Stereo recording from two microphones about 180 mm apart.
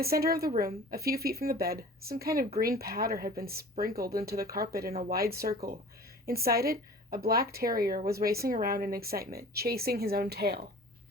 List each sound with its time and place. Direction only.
0.0 s speech: 60° right (ahead or behind)